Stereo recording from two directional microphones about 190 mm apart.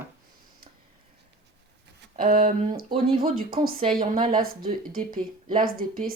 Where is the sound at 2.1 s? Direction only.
45° right (ahead or behind).